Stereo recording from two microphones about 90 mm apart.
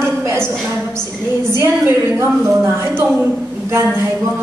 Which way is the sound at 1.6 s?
25° right (ahead or behind).